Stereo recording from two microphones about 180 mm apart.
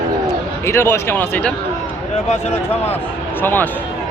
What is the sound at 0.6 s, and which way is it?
Speech, 15° left (ahead or behind).